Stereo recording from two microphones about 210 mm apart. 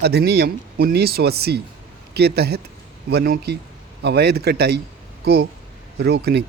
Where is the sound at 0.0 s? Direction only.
50° right (ahead or behind).